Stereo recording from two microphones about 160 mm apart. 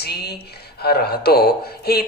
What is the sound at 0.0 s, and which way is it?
Speech, 85° left.